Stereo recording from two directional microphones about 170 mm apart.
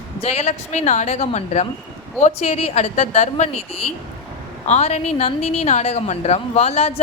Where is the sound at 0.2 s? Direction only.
40° left (ahead or behind).